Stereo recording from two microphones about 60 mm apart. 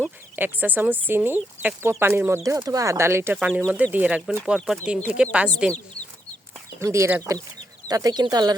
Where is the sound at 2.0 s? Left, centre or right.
Right.